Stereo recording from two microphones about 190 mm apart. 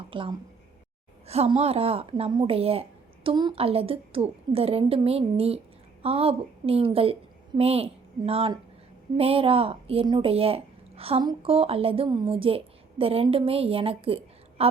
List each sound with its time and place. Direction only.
0.1 s a woman's voice: 25° right (ahead or behind)